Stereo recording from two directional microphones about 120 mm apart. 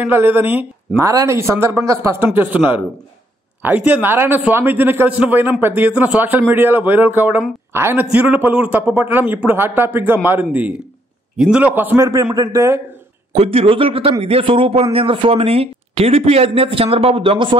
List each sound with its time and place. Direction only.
0.0 s a man's voice: 15° right (ahead or behind)
2.2 s a man's voice: 15° right (ahead or behind)
13.3 s speech: 55° right (ahead or behind)